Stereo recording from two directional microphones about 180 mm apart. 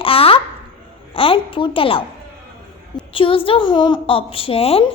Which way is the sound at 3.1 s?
30° left (ahead or behind).